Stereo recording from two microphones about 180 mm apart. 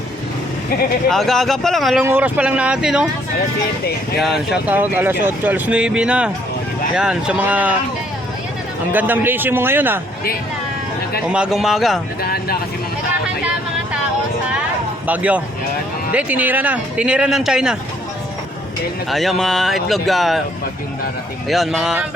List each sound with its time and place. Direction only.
1.1 s speech: centre (ahead or behind)
2.0 s speech: 10° right (ahead or behind)
4.2 s speech: centre (ahead or behind)
8.9 s speech: 10° right (ahead or behind)
11.3 s speech: 5° right (ahead or behind)
12.2 s speech: 60° left (ahead or behind)
15.0 s speech: 10° right (ahead or behind)
19.1 s speech: centre (ahead or behind)
21.5 s speech: centre (ahead or behind)